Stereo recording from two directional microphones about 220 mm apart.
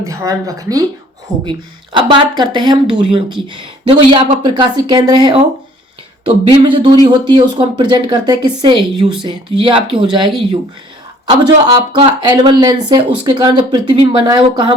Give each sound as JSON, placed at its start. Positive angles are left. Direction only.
{"t": 0.0, "sound": "speech", "side_deg": -15}
{"t": 6.6, "sound": "speech", "side_deg": -20}